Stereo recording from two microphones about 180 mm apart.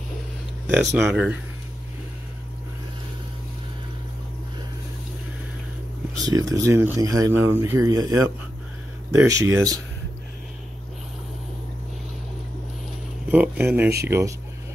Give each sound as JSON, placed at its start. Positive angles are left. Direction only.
{"t": 0.7, "sound": "speech", "side_deg": -10}
{"t": 6.2, "sound": "speech", "side_deg": -20}
{"t": 13.3, "sound": "speech", "side_deg": -10}